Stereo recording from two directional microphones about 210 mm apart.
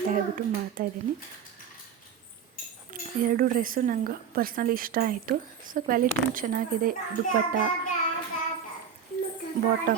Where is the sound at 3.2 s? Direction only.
40° right (ahead or behind).